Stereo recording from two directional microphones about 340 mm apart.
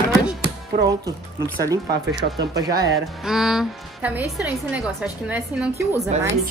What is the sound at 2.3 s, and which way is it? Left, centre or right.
Speech, centre.